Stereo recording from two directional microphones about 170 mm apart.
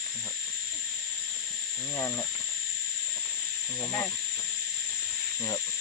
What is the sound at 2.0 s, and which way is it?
Speech, 15° left (ahead or behind).